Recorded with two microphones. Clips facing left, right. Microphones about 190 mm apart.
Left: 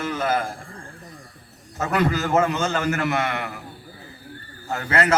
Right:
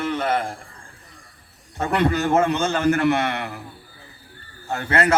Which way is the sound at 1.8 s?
30° right (ahead or behind).